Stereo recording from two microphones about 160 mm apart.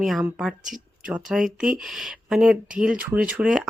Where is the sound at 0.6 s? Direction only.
55° right (ahead or behind).